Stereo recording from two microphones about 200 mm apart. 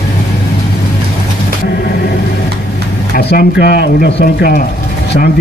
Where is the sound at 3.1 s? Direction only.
50° left (ahead or behind).